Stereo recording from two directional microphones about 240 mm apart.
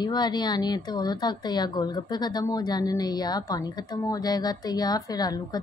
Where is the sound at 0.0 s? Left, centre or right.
Centre.